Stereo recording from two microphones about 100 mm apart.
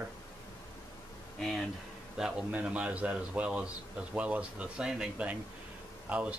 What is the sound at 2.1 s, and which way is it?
Speech, 5° right (ahead or behind).